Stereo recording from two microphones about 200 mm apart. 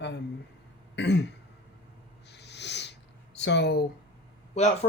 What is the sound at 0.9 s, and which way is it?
Throat clearing, 60° left (ahead or behind).